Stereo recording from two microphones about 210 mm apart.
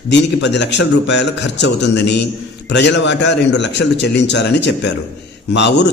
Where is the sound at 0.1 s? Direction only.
55° left (ahead or behind).